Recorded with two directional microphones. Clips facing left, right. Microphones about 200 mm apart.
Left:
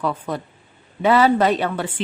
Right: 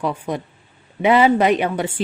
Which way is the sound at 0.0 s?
15° right (ahead or behind).